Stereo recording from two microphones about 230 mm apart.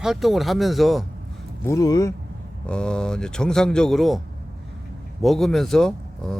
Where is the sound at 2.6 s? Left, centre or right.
Centre.